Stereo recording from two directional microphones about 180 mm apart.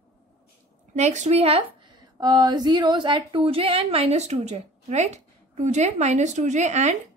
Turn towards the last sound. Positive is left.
turn(degrees=-40)  # may be behind; listen again after turning